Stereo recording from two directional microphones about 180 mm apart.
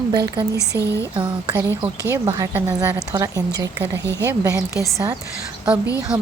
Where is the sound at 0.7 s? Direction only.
10° right (ahead or behind).